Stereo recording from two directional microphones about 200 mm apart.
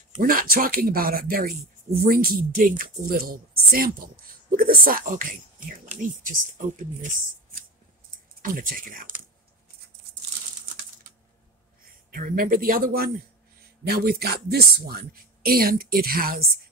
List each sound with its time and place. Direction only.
0.1 s speech: 45° right (ahead or behind)
12.1 s speech: 45° right (ahead or behind)